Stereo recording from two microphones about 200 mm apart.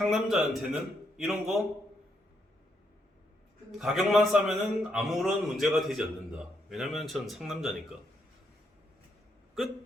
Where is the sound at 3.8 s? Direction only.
Centre (ahead or behind).